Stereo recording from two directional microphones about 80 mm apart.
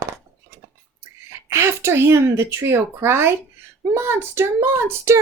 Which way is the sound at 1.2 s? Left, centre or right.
Right.